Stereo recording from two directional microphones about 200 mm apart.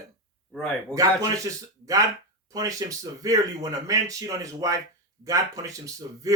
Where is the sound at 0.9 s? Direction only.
15° right (ahead or behind).